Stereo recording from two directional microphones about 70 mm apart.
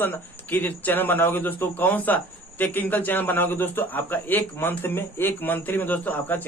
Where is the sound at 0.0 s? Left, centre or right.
Left.